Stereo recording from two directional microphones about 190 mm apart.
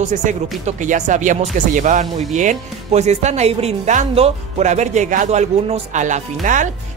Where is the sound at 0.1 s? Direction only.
40° right (ahead or behind).